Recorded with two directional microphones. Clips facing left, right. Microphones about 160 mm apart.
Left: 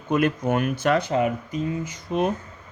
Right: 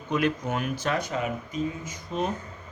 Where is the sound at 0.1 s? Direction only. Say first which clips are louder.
Left 5 dB; 50° left (ahead or behind).